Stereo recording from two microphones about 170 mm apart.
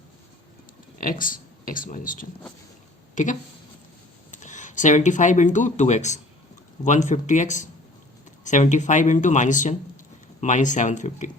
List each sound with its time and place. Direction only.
0.9 s speech: 55° left (ahead or behind)